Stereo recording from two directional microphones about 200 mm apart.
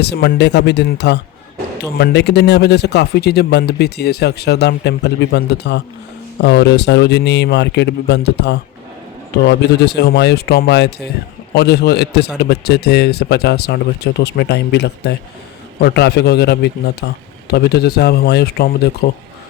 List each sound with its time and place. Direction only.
0.0 s a man's voice: 55° left (ahead or behind)
9.8 s a man's voice: 55° left (ahead or behind)